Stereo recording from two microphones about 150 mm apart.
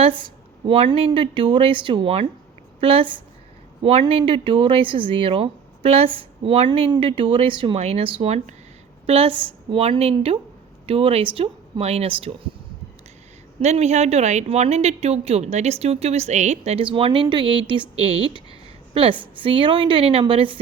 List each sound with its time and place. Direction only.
0.2 s a woman's voice: 35° right (ahead or behind)
13.6 s a woman's voice: 50° right (ahead or behind)